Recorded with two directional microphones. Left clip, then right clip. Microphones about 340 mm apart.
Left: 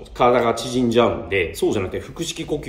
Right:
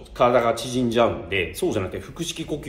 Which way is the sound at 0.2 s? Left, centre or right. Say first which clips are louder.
Left 2 dB; centre.